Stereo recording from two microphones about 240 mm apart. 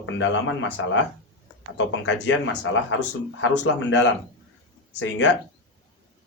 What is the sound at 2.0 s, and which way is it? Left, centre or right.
Speech, left.